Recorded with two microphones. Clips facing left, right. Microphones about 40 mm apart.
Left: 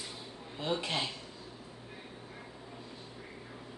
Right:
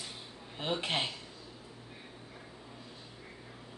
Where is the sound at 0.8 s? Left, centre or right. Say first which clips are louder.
Right 1 dB; right.